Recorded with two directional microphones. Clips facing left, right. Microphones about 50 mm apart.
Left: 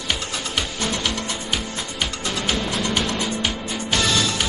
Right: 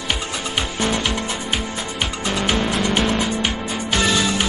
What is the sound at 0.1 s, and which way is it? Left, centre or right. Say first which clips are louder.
Music: right 1 dB; right.